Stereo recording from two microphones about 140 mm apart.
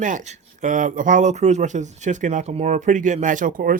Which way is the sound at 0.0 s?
65° right (ahead or behind).